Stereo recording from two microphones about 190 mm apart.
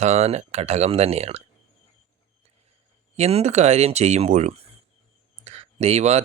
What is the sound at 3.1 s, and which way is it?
Speech, 35° right (ahead or behind).